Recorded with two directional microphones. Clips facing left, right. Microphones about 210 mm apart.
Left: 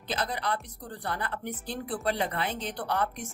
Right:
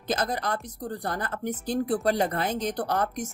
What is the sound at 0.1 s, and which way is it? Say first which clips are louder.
A woman's voice: right 4 dB; 45° right (ahead or behind).